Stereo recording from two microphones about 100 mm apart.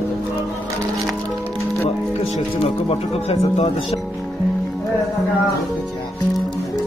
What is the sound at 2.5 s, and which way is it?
Speech, 70° left (ahead or behind).